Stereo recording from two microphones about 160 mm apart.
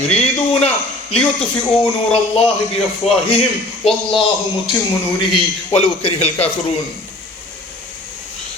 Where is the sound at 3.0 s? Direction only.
40° left (ahead or behind).